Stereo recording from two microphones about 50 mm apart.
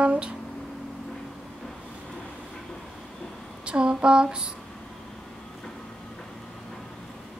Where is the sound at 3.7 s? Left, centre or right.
Centre.